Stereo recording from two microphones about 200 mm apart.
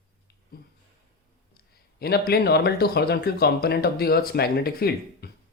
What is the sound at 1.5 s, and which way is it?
Speech, 50° left (ahead or behind).